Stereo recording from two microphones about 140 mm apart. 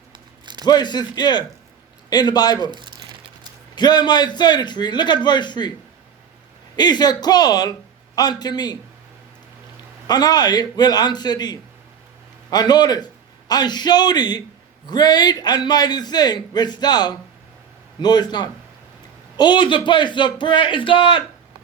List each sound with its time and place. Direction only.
0.6 s a man's voice: 30° left (ahead or behind)
2.6 s speech: 35° right (ahead or behind)
3.8 s a man's voice: 30° left (ahead or behind)
6.7 s a man's voice: 30° left (ahead or behind)
10.1 s a man's voice: 30° left (ahead or behind)